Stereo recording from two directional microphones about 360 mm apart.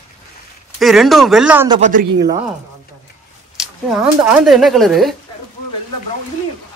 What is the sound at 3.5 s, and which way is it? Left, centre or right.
Speech, centre.